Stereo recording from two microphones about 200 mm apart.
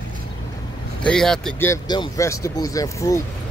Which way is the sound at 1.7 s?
20° left (ahead or behind).